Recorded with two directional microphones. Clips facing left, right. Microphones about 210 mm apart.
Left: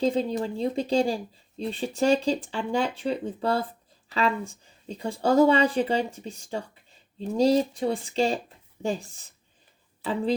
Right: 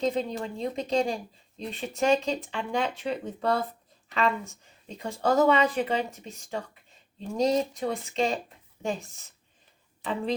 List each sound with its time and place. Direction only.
0.0 s speech: 30° left (ahead or behind)